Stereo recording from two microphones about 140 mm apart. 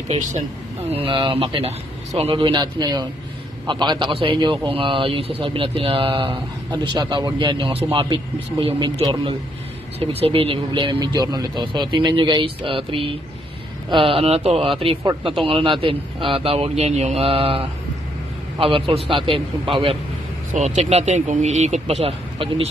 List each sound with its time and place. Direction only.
0.9 s a man's voice: 35° right (ahead or behind)
9.9 s a man's voice: 45° right (ahead or behind)
20.5 s speech: 55° right (ahead or behind)